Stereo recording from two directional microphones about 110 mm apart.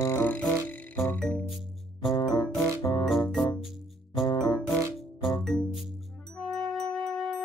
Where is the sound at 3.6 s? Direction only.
Centre (ahead or behind).